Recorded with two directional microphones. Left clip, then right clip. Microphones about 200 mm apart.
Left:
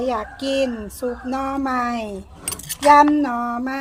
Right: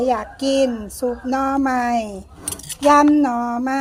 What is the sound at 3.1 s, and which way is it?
Speech, 10° right (ahead or behind).